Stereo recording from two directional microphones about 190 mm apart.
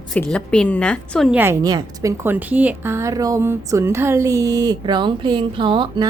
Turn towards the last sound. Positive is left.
turn(degrees=-25)  # may be behind; listen again after turning